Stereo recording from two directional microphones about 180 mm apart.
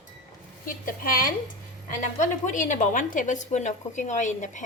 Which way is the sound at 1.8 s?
45° left (ahead or behind).